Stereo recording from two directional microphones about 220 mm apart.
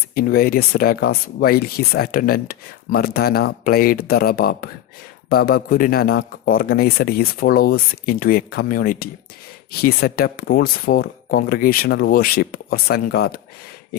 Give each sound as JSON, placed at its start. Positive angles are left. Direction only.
{"t": 0.1, "sound": "speech", "side_deg": 40}